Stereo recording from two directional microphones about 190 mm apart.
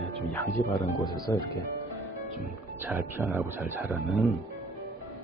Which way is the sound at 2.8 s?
10° right (ahead or behind).